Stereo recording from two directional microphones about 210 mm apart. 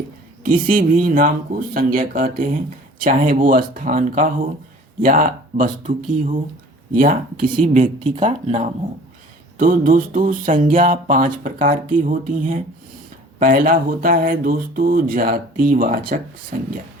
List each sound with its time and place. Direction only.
0.4 s speech: 40° right (ahead or behind)